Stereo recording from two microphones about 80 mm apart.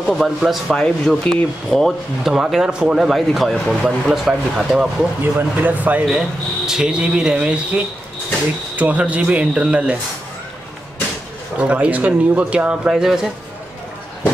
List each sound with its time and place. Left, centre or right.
0.0 s speech: centre
5.2 s speech: right
6.0 s speech: centre
11.5 s speech: centre